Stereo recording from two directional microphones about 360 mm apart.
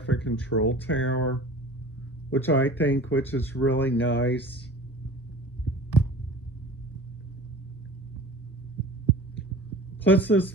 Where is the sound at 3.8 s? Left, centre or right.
Left.